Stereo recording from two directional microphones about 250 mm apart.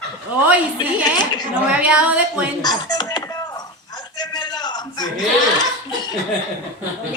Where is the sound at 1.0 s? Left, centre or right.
Centre.